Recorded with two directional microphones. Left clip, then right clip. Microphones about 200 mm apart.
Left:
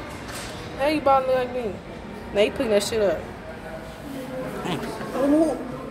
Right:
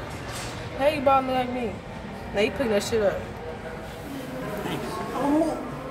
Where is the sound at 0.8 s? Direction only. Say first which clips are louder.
Left 1 dB; 35° left (ahead or behind).